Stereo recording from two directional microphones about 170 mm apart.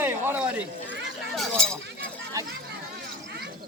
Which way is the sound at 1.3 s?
5° left (ahead or behind).